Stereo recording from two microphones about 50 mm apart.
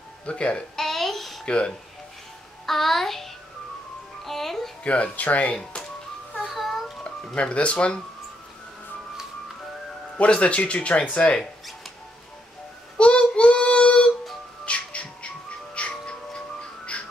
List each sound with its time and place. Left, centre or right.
0.2 s speech: left
0.8 s a sound: centre
1.4 s speech: centre
2.6 s a child's voice: centre
4.8 s speech: left
6.4 s a sound: centre
7.3 s speech: left
10.1 s speech: left
12.9 s child singing: left
14.6 s music: left